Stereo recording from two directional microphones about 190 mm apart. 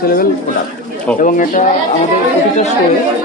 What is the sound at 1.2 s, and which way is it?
Speech, 45° left (ahead or behind).